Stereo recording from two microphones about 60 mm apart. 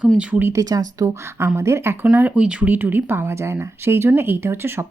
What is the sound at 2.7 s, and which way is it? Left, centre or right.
Speech, right.